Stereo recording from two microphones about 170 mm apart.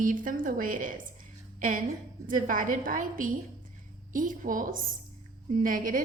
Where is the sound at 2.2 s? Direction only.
50° right (ahead or behind).